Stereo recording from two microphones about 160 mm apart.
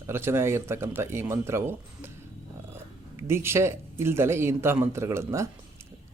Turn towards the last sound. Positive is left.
turn(degrees=-15)  # may be behind; listen again after turning